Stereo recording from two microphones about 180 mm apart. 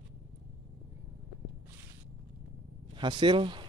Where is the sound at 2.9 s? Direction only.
25° right (ahead or behind).